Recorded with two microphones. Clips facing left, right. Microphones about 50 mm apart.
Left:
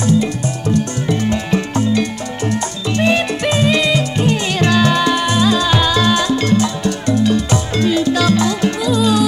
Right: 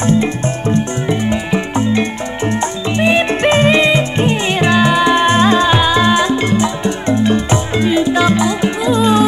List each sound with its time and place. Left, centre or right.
0.0 s music: right
3.3 s music: right